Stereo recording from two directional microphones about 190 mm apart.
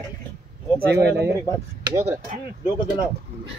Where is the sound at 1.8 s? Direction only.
15° right (ahead or behind).